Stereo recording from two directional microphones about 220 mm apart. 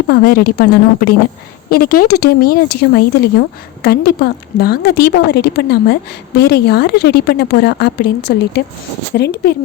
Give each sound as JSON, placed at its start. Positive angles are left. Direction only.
{"t": 0.1, "sound": "a woman's voice", "side_deg": 45}
{"t": 2.0, "sound": "speech", "side_deg": 90}
{"t": 2.4, "sound": "a woman's voice", "side_deg": 45}